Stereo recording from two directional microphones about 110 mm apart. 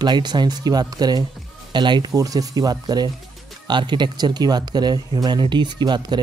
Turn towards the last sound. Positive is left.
turn(degrees=-40)  # may be behind; listen again after turning